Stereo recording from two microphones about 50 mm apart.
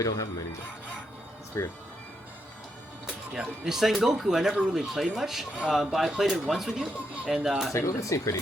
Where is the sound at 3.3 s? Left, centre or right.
Centre.